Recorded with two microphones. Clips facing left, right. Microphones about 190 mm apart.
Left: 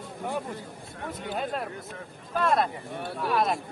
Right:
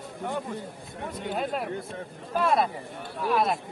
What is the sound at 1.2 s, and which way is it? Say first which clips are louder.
A man's voice: right 2 dB; centre (ahead or behind).